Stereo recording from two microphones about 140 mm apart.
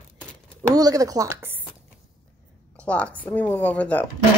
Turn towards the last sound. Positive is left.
turn(degrees=10)  # may be behind; listen again after turning